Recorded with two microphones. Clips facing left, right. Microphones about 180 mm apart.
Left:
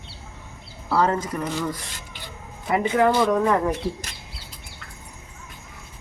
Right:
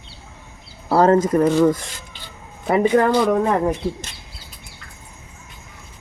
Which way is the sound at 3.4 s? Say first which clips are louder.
Right 2 dB; 30° right (ahead or behind).